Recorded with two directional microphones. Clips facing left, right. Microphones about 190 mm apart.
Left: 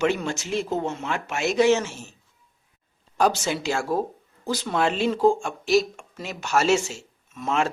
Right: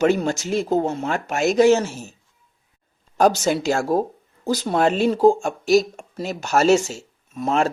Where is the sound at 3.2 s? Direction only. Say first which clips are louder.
Right 5 dB; 40° right (ahead or behind).